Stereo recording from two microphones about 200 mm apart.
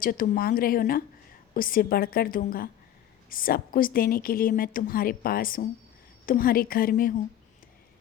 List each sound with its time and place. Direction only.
0.0 s a woman's voice: 45° left (ahead or behind)